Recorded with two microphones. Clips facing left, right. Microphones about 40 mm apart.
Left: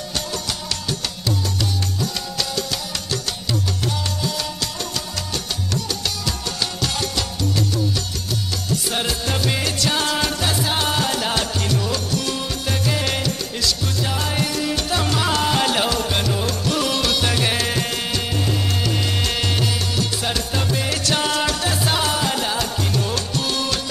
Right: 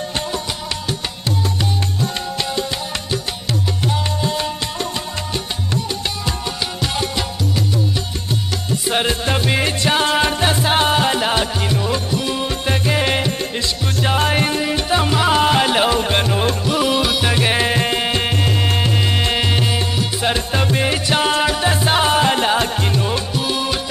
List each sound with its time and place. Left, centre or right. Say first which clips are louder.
3.1 s music: even; right
8.8 s music: right 8 dB; right
16.6 s music: right 2 dB; centre; by 18.9 s right
18.9 s music: right 4 dB; right
23.3 s music: right 3 dB; centre